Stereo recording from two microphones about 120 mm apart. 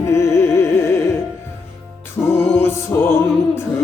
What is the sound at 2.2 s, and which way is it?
Music, 10° left (ahead or behind).